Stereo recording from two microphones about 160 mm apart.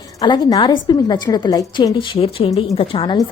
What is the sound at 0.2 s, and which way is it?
A woman's voice, 25° left (ahead or behind).